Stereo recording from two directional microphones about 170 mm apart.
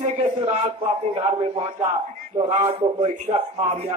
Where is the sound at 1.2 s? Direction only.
35° right (ahead or behind).